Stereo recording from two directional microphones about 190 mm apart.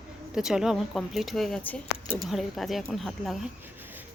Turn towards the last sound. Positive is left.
turn(degrees=0)  # may be behind; listen again after turning